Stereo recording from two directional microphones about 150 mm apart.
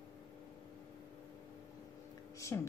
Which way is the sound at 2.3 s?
20° left (ahead or behind).